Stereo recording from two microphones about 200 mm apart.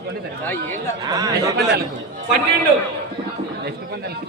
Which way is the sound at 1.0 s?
20° right (ahead or behind).